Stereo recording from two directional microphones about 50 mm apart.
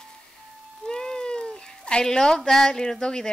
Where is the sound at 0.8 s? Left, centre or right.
Centre.